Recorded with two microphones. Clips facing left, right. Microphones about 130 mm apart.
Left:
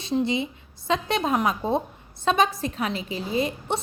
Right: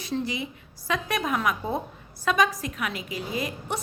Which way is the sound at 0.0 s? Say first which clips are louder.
Left 5 dB; 25° left (ahead or behind).